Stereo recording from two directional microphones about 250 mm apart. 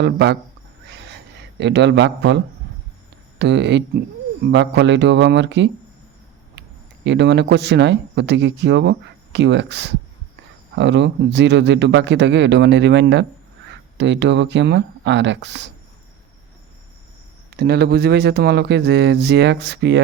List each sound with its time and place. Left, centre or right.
0.0 s speech: right
1.5 s speech: right
17.6 s speech: right